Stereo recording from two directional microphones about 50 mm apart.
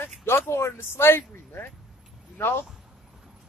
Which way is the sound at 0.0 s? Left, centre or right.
Left.